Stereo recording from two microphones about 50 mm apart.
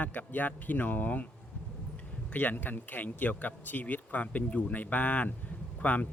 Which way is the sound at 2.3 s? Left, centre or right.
Left.